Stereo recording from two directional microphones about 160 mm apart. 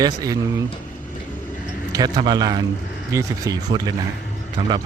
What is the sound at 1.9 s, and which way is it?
Speech, 25° right (ahead or behind).